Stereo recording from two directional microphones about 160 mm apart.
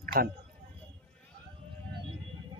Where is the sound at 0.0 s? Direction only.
65° right (ahead or behind).